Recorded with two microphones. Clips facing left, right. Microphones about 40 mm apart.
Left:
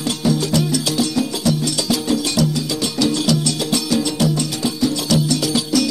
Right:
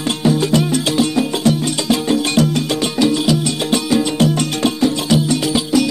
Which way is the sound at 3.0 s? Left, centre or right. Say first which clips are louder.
Right 2 dB; right.